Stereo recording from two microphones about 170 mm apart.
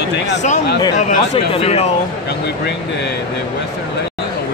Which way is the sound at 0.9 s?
40° left (ahead or behind).